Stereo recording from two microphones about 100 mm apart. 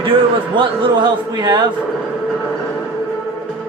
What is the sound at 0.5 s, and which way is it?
A man's voice, 50° right (ahead or behind).